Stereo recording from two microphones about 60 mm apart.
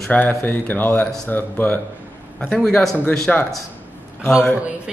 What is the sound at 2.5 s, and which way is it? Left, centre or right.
Speech, centre.